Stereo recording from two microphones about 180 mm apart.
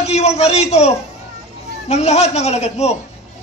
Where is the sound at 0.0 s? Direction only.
35° left (ahead or behind).